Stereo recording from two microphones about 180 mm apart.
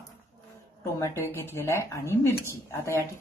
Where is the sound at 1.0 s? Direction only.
15° left (ahead or behind).